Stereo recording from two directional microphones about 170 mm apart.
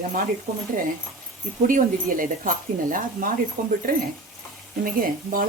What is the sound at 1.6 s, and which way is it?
Speech, 50° right (ahead or behind).